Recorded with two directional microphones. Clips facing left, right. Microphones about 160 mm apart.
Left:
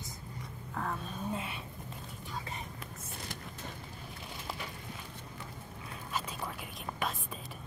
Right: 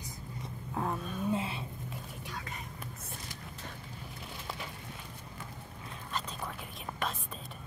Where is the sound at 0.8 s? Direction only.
20° right (ahead or behind).